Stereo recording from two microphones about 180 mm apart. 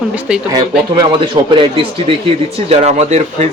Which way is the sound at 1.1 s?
25° right (ahead or behind).